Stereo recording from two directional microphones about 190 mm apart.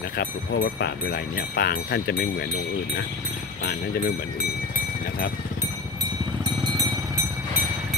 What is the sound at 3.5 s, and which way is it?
Speech, 50° left (ahead or behind).